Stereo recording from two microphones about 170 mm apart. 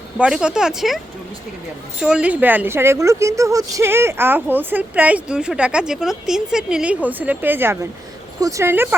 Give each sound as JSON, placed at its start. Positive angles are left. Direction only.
{"t": 0.2, "sound": "speech", "side_deg": -5}